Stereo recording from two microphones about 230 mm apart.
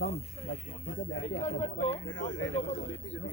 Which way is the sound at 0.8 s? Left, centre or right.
Left.